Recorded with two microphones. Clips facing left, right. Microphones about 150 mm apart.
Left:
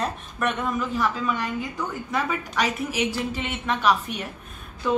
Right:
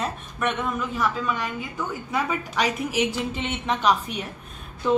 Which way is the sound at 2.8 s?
20° right (ahead or behind).